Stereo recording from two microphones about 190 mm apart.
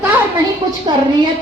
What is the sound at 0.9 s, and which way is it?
Speech, 25° right (ahead or behind).